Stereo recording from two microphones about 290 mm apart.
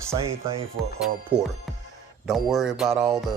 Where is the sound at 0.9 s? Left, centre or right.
Centre.